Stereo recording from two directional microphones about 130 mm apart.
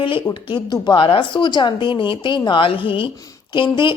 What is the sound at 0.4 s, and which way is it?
A woman's voice, 40° left (ahead or behind).